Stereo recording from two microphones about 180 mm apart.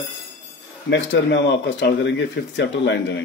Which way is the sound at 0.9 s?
85° left.